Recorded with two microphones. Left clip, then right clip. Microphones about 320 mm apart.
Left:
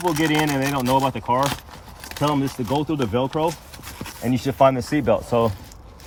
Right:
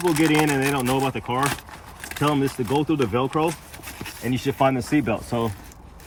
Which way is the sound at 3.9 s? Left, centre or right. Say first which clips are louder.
Left 3 dB; centre.